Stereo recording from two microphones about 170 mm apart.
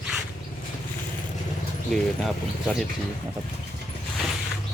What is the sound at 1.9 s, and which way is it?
Speech, centre (ahead or behind).